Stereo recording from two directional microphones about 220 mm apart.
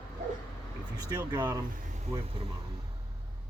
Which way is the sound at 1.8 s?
30° right (ahead or behind).